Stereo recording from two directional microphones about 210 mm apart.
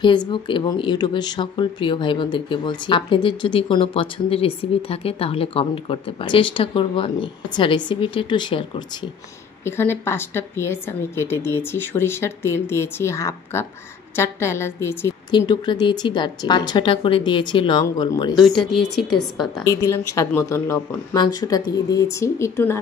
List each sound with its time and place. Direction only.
0.0 s speech: 20° left (ahead or behind)
9.7 s speech: 10° left (ahead or behind)
18.4 s speech: centre (ahead or behind)
19.6 s speech: 15° left (ahead or behind)